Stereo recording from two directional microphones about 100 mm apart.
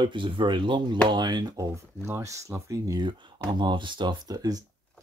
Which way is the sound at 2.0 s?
30° right (ahead or behind).